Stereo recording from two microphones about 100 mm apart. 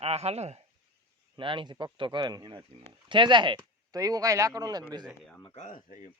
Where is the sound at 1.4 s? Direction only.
55° right (ahead or behind); by 2.5 s 40° right (ahead or behind).